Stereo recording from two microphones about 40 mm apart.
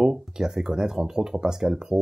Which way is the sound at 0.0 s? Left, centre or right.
Centre.